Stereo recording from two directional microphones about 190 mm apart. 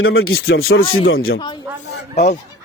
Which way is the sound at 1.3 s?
25° left (ahead or behind).